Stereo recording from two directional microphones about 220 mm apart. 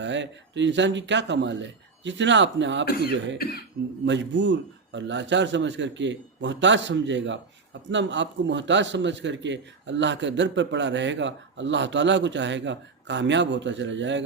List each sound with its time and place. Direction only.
0.0 s a man's voice: 55° right (ahead or behind)
3.3 s speech: 45° left (ahead or behind)
4.0 s a man's voice: 55° right (ahead or behind)